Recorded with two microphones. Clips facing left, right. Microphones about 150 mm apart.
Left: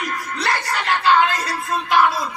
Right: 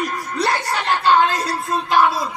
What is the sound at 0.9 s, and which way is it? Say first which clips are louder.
Speech: right 1 dB; centre (ahead or behind).